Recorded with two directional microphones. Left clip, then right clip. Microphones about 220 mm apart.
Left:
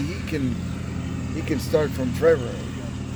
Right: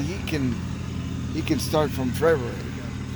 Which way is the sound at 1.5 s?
50° right (ahead or behind).